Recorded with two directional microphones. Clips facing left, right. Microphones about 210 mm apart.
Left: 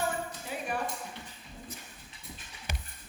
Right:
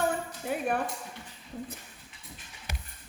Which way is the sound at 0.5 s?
55° right (ahead or behind).